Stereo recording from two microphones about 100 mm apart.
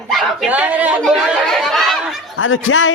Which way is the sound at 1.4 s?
Centre (ahead or behind).